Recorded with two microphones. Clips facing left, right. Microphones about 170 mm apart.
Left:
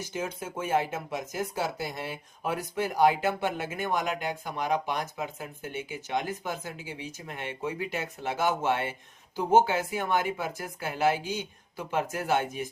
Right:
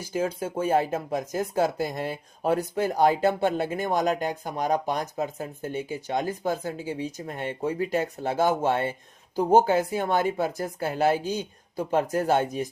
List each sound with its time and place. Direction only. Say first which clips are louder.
0.2 s speech: right 7 dB; 30° right (ahead or behind)